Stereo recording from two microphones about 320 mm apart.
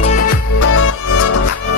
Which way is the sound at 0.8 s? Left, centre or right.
Left.